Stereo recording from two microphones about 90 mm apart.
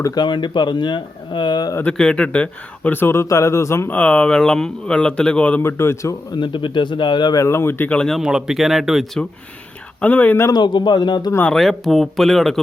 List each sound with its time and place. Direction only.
0.0 s speech: 55° left (ahead or behind)
1.8 s speech: 10° left (ahead or behind); by 3.8 s 35° left (ahead or behind)
3.8 s speech: 15° left (ahead or behind)
5.6 s speech: 30° left (ahead or behind)
6.3 s speech: 60° left (ahead or behind)
7.3 s speech: 30° left (ahead or behind)
7.9 s speech: 10° left (ahead or behind)
8.2 s speech: 5° right (ahead or behind)
10.0 s speech: 15° left (ahead or behind)
10.5 s speech: 55° left (ahead or behind)
11.4 s speech: 5° left (ahead or behind)